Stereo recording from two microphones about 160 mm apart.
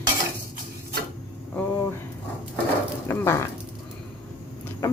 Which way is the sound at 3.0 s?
15° left (ahead or behind).